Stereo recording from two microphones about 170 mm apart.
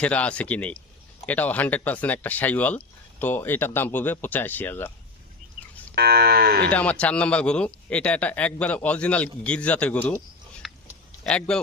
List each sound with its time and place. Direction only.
0.0 s speech: 5° left (ahead or behind)
5.9 s speech: 70° right (ahead or behind)
6.7 s speech: 10° left (ahead or behind)
10.6 s a sound: centre (ahead or behind)
11.2 s speech: 5° left (ahead or behind)